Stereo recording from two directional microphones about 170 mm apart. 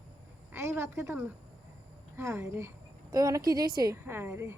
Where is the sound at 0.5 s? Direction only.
15° right (ahead or behind).